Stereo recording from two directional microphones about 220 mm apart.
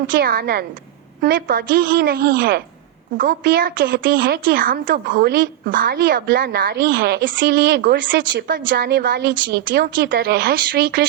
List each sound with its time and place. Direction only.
0.2 s speech: 45° right (ahead or behind)